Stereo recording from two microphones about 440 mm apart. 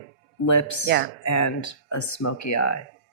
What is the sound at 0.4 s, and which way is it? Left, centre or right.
Speech, left.